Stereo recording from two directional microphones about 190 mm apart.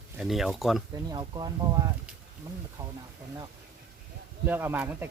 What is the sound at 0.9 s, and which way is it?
Speech, 20° right (ahead or behind).